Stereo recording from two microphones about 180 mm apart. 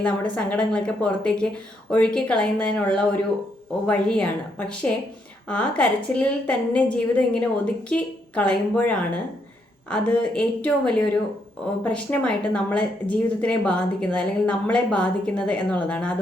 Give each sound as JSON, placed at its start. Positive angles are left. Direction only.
{"t": 0.0, "sound": "speech", "side_deg": 5}